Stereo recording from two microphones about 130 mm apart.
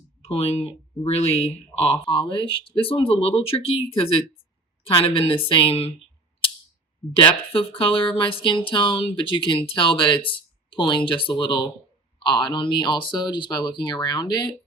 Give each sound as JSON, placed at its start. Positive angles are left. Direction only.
{"t": 0.2, "sound": "speech", "side_deg": 50}
{"t": 7.2, "sound": "speech", "side_deg": 40}